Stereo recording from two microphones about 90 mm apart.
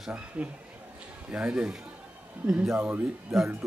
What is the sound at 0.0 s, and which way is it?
A man's voice, 10° right (ahead or behind).